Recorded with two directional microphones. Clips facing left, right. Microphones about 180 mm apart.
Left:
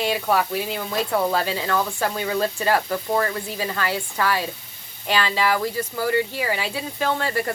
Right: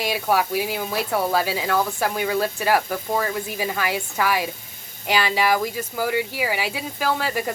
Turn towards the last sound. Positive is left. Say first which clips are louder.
# even
turn(degrees=-5)  # may be behind; listen again after turning